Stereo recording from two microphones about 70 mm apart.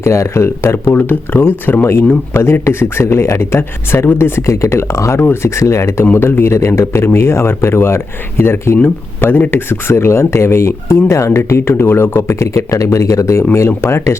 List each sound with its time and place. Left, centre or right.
0.0 s speech: left
0.9 s speech: left